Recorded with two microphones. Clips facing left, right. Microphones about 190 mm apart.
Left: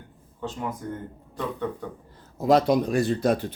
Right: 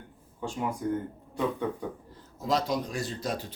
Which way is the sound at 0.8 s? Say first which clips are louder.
Right 5 dB; 10° right (ahead or behind).